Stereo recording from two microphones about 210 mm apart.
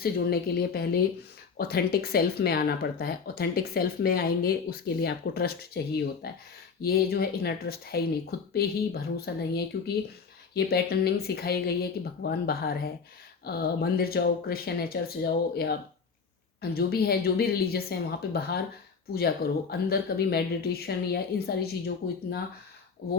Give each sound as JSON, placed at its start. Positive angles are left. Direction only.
{"t": 0.0, "sound": "speech", "side_deg": 45}